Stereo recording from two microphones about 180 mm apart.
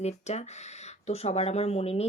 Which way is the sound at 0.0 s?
40° left (ahead or behind).